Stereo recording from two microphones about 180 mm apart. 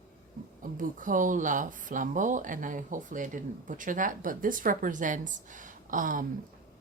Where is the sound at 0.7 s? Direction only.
45° right (ahead or behind).